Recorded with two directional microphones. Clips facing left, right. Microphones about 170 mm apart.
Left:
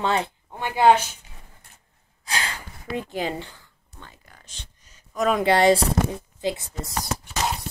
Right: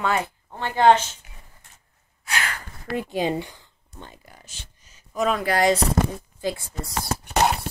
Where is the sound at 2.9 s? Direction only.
15° right (ahead or behind).